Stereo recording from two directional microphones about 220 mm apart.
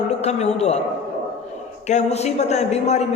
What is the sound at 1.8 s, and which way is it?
A man's voice, 30° left (ahead or behind).